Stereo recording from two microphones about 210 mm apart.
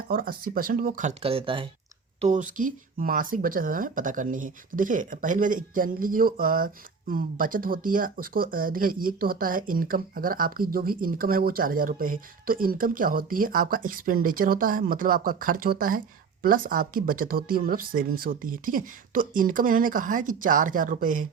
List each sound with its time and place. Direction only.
0.1 s speech: 45° right (ahead or behind)
1.2 s speech: 25° right (ahead or behind)
2.2 s speech: 35° right (ahead or behind)